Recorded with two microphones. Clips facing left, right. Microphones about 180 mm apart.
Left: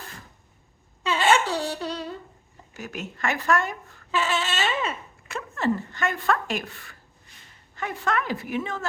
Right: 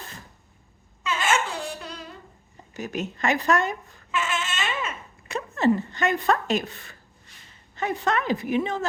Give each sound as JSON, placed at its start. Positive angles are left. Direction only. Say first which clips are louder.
{"t": 1.0, "sound": "laughter", "louder": "left 4 dB", "side_deg": 35}
{"t": 2.7, "sound": "speech", "louder": "right 5 dB", "side_deg": -20}
{"t": 4.1, "sound": "a sound", "louder": "left 3 dB", "side_deg": 35}
{"t": 5.3, "sound": "speech", "louder": "right 4 dB", "side_deg": -20}